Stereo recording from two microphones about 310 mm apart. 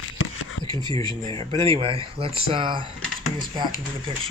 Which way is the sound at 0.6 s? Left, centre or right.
Centre.